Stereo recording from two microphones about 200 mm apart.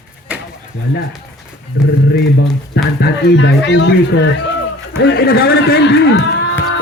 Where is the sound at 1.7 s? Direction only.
60° left (ahead or behind).